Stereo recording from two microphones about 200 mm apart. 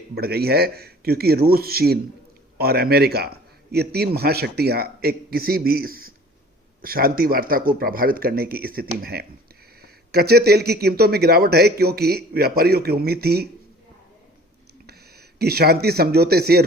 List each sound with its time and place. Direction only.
0.1 s a man's voice: 50° right (ahead or behind)
14.8 s speech: 50° right (ahead or behind)